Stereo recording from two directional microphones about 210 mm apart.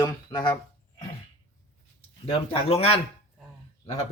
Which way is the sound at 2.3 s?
25° left (ahead or behind).